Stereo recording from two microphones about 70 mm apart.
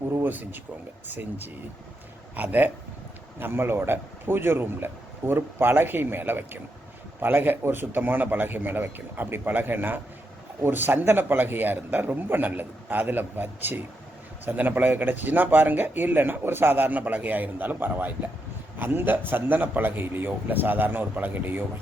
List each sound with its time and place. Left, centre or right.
0.2 s a man's voice: right